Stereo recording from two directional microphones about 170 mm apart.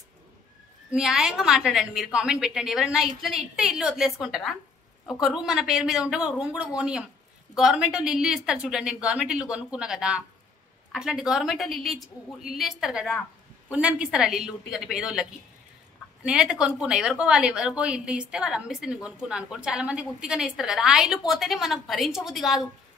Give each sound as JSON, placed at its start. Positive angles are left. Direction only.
{"t": 0.9, "sound": "a woman's voice", "side_deg": 0}
{"t": 16.3, "sound": "a woman's voice", "side_deg": -5}